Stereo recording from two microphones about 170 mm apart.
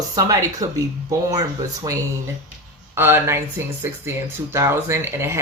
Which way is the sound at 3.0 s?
15° right (ahead or behind).